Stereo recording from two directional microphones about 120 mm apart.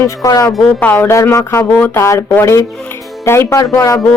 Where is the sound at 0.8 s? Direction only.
15° left (ahead or behind).